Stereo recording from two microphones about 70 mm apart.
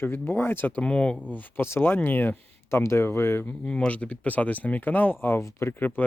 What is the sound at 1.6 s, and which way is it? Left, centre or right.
Speech, left.